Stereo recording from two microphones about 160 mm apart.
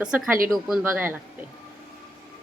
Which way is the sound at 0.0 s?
5° right (ahead or behind).